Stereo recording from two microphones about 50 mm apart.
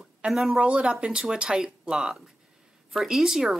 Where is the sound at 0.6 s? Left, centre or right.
Right.